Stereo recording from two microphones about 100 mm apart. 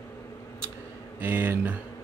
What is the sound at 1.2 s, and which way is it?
Speech, 20° right (ahead or behind).